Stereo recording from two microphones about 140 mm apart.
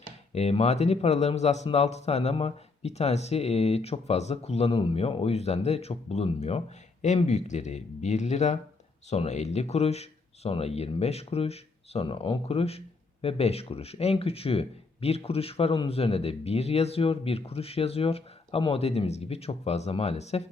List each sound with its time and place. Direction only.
0.3 s speech: 50° left (ahead or behind)